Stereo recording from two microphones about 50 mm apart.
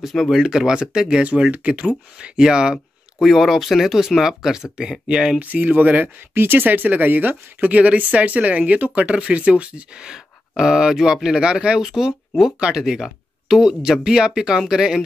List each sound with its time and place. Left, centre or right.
0.0 s speech: centre
0.4 s speech: centre
3.2 s speech: centre
5.4 s speech: right
6.3 s speech: right; by 11.8 s centre
11.8 s speech: centre